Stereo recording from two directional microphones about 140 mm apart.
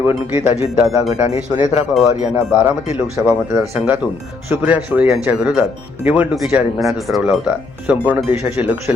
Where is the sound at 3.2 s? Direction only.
5° right (ahead or behind).